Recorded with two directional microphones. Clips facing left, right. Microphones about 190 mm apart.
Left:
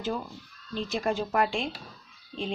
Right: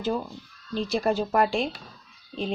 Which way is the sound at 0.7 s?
35° right (ahead or behind).